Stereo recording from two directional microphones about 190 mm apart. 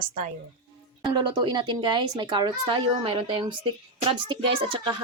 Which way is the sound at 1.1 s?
25° right (ahead or behind).